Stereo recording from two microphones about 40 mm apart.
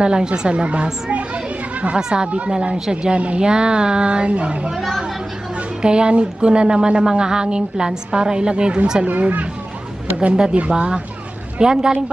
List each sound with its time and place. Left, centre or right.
0.0 s a woman's voice: right
2.0 s speech: centre
2.3 s a woman's voice: right
5.8 s a woman's voice: right
9.2 s speech: right
10.7 s a woman's voice: right